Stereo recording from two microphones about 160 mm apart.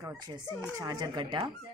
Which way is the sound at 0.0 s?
20° right (ahead or behind).